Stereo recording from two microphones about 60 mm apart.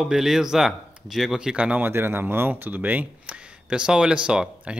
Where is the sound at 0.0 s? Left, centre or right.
Centre.